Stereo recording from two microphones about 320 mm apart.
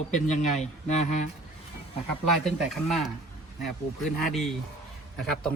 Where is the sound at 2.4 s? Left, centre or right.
Centre.